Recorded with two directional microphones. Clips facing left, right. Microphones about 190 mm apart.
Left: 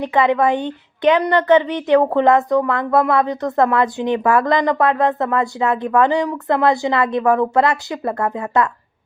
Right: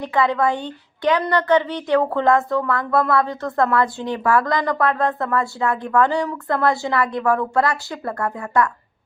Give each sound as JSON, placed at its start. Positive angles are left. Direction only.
{"t": 0.0, "sound": "a woman's voice", "side_deg": 20}